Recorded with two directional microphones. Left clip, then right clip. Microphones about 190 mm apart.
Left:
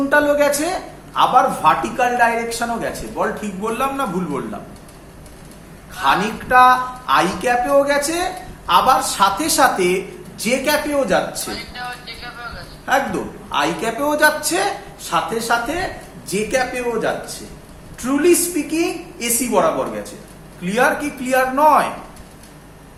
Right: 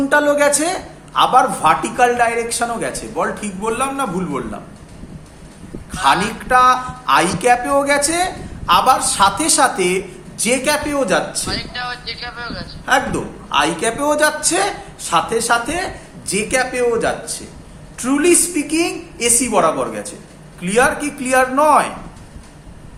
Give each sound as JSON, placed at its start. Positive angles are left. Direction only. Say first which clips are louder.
{"t": 0.1, "sound": "speech", "louder": "right 1 dB", "side_deg": -25}
{"t": 5.9, "sound": "speech", "louder": "right 2 dB", "side_deg": -25}
{"t": 11.4, "sound": "speech", "louder": "right 4 dB", "side_deg": -60}
{"t": 12.9, "sound": "a woman's voice", "louder": "right 2 dB", "side_deg": -25}